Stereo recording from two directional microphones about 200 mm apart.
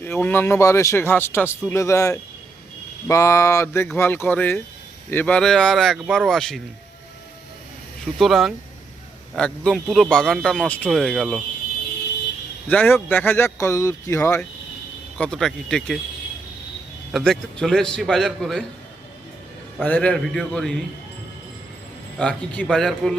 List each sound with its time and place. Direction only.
0.0 s speech: 10° left (ahead or behind)
8.0 s speech: centre (ahead or behind)
12.6 s speech: 10° left (ahead or behind)
15.2 s speech: 5° left (ahead or behind)
17.1 s speech: centre (ahead or behind)
19.8 s speech: 5° left (ahead or behind)
22.2 s speech: 5° left (ahead or behind)